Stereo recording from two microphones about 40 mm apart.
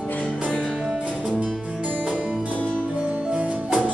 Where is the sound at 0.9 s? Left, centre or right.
Right.